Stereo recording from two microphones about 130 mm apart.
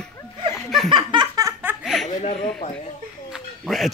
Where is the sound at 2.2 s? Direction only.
60° left (ahead or behind).